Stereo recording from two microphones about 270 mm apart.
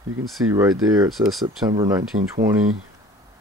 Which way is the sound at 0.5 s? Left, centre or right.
Centre.